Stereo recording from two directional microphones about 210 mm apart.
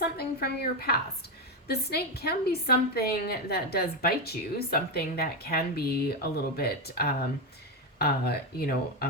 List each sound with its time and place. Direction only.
0.0 s a woman's voice: 50° left (ahead or behind)